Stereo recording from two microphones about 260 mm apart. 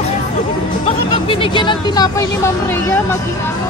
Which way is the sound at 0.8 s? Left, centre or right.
Centre.